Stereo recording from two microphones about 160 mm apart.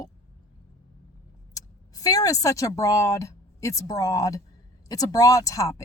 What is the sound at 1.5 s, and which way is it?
Speech, 20° left (ahead or behind).